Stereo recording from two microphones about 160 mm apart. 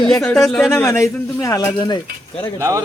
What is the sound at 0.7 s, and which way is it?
Speech, 15° left (ahead or behind).